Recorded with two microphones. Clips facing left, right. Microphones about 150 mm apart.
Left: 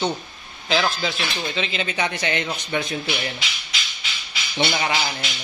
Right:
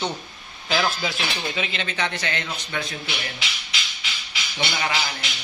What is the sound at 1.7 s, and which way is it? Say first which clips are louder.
A man's voice: left 3 dB; 10° left (ahead or behind).